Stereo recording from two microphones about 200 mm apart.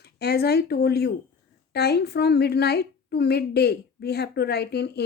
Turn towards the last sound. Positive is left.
turn(degrees=55)  # may be behind; listen again after turning